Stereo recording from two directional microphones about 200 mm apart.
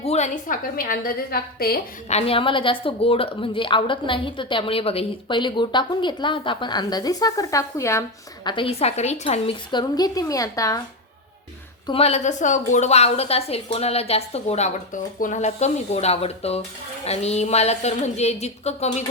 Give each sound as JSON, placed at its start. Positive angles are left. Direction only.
{"t": 0.0, "sound": "a woman's voice", "side_deg": 35}
{"t": 2.0, "sound": "speech", "side_deg": 30}
{"t": 8.4, "sound": "speech", "side_deg": 25}
{"t": 11.9, "sound": "a woman's voice", "side_deg": 30}